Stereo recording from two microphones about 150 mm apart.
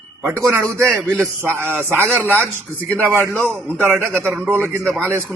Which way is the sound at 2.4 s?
10° left (ahead or behind).